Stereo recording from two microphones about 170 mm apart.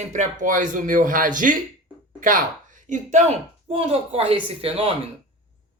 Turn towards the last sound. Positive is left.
turn(degrees=-35)  # may be behind; listen again after turning